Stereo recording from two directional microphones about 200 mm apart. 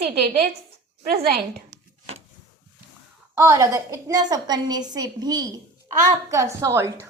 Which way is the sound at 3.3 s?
15° right (ahead or behind).